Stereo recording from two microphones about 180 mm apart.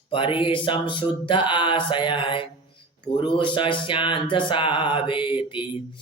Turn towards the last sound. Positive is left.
turn(degrees=25)  # may be behind; listen again after turning